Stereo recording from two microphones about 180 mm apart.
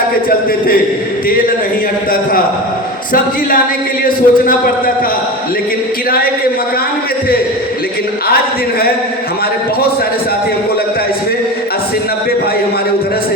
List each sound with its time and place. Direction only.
4.0 s a man's voice: 50° left (ahead or behind)